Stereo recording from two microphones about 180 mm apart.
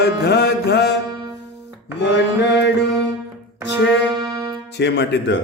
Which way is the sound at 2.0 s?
70° left (ahead or behind).